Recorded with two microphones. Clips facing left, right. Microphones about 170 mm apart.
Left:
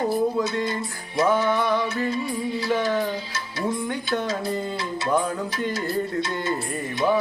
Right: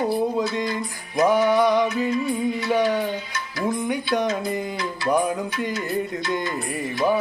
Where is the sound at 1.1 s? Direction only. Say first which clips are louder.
Right 3 dB; 15° right (ahead or behind).